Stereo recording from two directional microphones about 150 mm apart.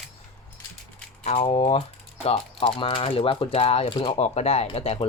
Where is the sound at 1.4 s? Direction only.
40° left (ahead or behind).